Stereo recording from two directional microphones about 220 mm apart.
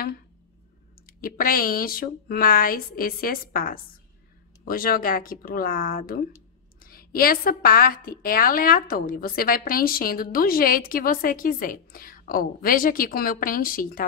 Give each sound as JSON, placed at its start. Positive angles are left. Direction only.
{"t": 1.0, "sound": "a woman's voice", "side_deg": 40}